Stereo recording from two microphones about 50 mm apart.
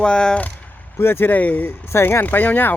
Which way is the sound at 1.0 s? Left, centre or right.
Left.